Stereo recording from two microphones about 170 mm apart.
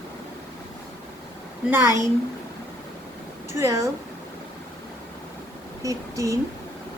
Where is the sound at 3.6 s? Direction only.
20° right (ahead or behind).